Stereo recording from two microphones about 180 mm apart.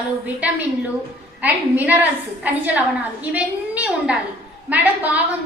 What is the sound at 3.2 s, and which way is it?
A woman's voice, 10° right (ahead or behind).